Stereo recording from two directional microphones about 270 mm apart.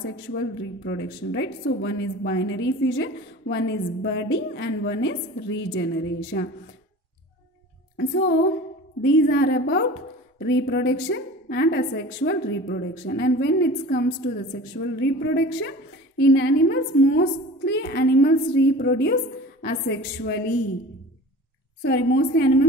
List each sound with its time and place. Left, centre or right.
0.3 s speech: left
8.0 s speech: left
21.8 s speech: left